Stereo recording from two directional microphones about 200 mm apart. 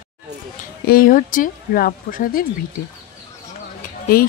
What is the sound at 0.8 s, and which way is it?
Speech, 45° left (ahead or behind).